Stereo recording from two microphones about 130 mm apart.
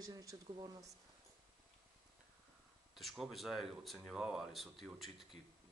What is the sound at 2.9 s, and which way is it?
Speech, centre (ahead or behind).